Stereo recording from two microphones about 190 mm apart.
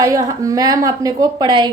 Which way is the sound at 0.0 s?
15° right (ahead or behind).